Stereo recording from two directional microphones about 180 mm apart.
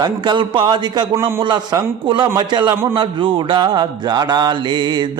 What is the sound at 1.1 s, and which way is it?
Mantra, 15° right (ahead or behind).